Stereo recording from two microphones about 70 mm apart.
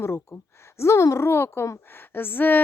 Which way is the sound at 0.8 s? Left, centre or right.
Left.